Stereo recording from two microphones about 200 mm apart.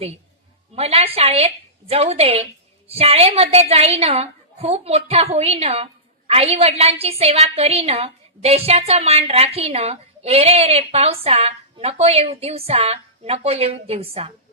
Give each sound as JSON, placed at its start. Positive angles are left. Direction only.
{"t": 0.8, "sound": "a woman's voice", "side_deg": -30}